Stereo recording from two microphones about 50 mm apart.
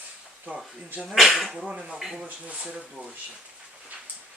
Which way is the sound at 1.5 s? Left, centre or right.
Centre.